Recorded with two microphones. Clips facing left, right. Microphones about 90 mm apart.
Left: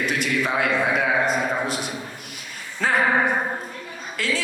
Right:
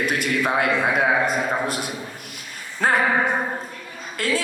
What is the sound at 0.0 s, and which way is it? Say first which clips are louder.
A man's voice: right 1 dB; 50° right (ahead or behind).